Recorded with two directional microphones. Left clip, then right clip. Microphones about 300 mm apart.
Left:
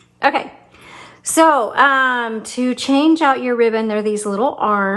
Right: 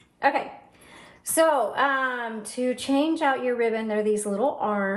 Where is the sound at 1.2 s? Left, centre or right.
Left.